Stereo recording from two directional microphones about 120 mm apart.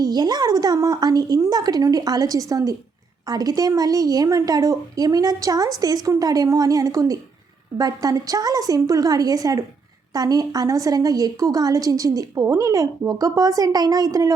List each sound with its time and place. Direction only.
0.0 s a woman's voice: 35° right (ahead or behind)